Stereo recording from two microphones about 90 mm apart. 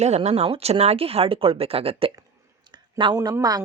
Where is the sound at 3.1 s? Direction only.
45° right (ahead or behind).